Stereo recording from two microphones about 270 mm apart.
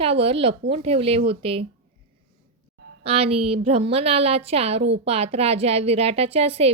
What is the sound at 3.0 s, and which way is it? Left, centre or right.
A woman's voice, right.